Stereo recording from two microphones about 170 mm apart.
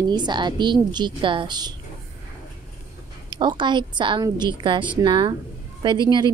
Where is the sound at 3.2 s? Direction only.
25° right (ahead or behind).